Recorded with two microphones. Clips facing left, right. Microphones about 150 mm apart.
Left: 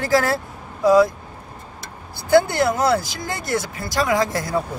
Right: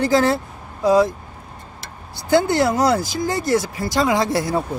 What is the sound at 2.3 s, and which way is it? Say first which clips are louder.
Speech: even; 20° right (ahead or behind).